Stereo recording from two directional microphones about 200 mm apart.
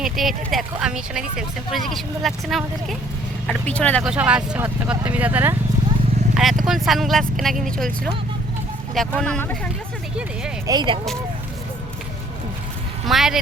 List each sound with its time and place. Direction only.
0.0 s speech: centre (ahead or behind)
4.1 s speech: 5° right (ahead or behind)
10.7 s speech: 25° right (ahead or behind)
13.1 s speech: centre (ahead or behind)